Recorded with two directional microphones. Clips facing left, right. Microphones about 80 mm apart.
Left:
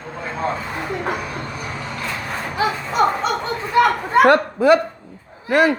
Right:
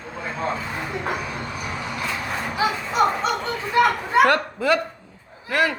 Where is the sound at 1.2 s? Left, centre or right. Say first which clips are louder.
Left 1 dB; centre.